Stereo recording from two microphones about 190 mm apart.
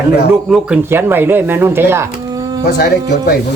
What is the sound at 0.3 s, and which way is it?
Speech, 5° right (ahead or behind).